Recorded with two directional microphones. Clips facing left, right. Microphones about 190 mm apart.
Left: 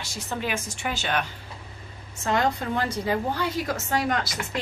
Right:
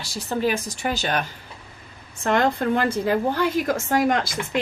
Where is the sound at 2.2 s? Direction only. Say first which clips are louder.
Right 4 dB; 55° right (ahead or behind).